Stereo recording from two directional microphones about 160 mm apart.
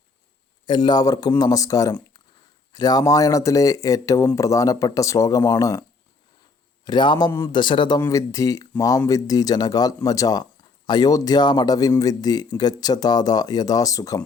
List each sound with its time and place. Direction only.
0.6 s speech: 30° left (ahead or behind)
6.8 s speech: 30° left (ahead or behind)